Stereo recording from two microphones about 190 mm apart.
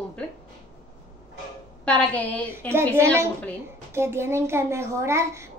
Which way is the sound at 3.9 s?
15° right (ahead or behind).